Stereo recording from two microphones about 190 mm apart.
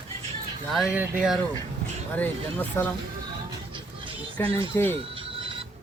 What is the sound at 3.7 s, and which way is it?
Music, 25° right (ahead or behind).